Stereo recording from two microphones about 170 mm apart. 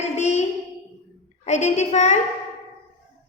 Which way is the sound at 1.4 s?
40° left (ahead or behind).